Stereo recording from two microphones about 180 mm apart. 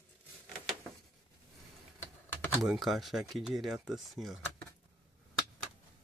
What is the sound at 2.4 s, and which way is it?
Speech, centre (ahead or behind).